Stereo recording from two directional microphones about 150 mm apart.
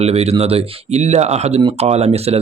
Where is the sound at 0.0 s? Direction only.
45° right (ahead or behind).